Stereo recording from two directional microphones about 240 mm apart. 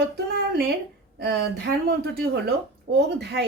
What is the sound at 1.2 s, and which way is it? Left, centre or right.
Speech, right.